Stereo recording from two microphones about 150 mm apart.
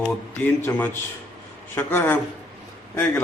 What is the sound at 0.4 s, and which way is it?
A man's voice, 10° left (ahead or behind).